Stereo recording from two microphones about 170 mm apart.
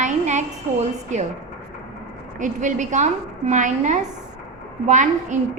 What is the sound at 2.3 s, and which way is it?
A woman's voice, 45° right (ahead or behind).